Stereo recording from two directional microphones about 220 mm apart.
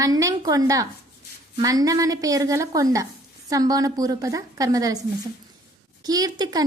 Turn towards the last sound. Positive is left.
turn(degrees=-15)  # may be behind; listen again after turning